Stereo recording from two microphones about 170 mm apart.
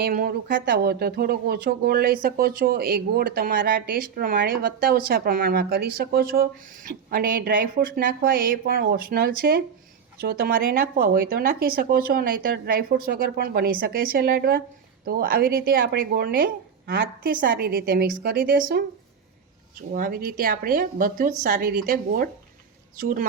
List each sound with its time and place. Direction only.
0.0 s speech: 60° right (ahead or behind)
19.9 s speech: 55° right (ahead or behind)